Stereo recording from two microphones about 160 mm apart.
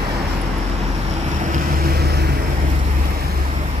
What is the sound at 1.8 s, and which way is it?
Vehicle, 75° right (ahead or behind).